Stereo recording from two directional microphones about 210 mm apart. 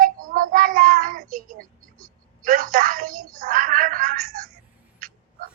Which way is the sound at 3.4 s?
40° right (ahead or behind).